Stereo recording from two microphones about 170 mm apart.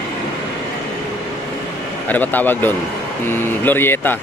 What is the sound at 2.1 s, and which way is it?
Speech, 10° left (ahead or behind).